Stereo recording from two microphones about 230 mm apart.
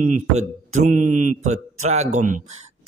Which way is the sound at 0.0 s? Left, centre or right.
Right.